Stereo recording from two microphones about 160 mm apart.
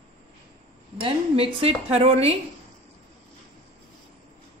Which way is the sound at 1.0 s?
35° right (ahead or behind).